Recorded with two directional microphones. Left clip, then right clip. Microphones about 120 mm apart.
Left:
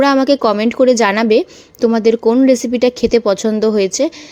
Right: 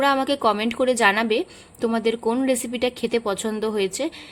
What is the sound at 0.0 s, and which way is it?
A woman's voice, 45° left (ahead or behind).